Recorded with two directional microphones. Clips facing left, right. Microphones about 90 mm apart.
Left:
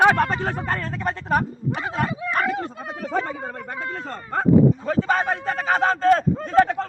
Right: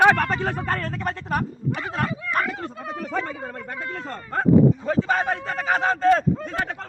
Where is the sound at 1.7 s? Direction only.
25° left (ahead or behind).